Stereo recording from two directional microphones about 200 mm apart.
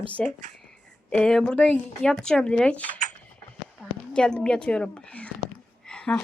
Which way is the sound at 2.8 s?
40° right (ahead or behind).